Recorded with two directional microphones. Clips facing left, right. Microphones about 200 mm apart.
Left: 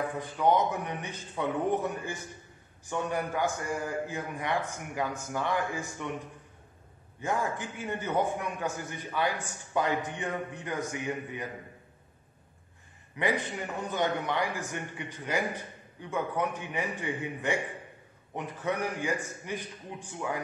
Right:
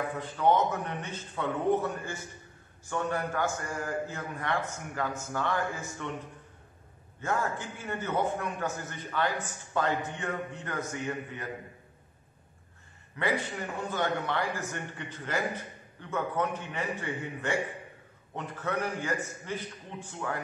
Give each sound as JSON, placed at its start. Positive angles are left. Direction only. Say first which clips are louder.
{"t": 0.2, "sound": "a man's voice", "louder": "even", "side_deg": 15}
{"t": 7.2, "sound": "a man's voice", "louder": "even", "side_deg": 15}
{"t": 13.2, "sound": "a man's voice", "louder": "left 1 dB", "side_deg": 15}